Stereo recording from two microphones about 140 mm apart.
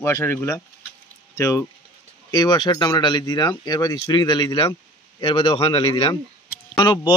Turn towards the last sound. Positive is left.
turn(degrees=30)  # may be behind; listen again after turning